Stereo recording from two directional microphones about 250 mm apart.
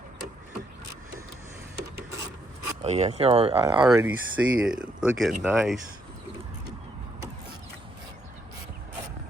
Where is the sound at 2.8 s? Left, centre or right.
Right.